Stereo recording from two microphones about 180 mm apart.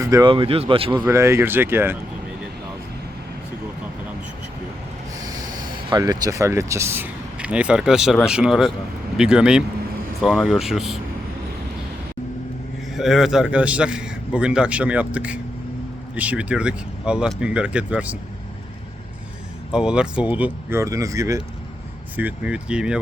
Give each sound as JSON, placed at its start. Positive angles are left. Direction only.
{"t": 0.0, "sound": "speech", "side_deg": -20}
{"t": 1.0, "sound": "speech", "side_deg": -15}
{"t": 5.1, "sound": "snort", "side_deg": -20}
{"t": 5.9, "sound": "a man's voice", "side_deg": -20}
{"t": 12.9, "sound": "a man's voice", "side_deg": 0}
{"t": 19.7, "sound": "speech", "side_deg": -5}